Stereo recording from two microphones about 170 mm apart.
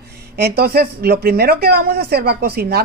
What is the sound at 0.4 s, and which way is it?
Speech, 65° right (ahead or behind).